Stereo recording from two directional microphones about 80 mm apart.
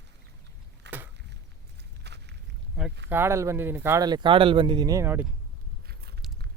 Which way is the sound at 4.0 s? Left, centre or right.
Right.